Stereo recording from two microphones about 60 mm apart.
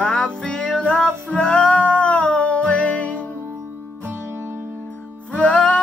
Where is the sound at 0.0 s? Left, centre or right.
Centre.